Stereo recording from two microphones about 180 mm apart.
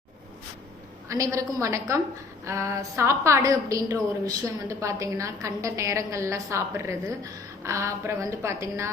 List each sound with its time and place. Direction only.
1.0 s a woman's voice: 15° right (ahead or behind)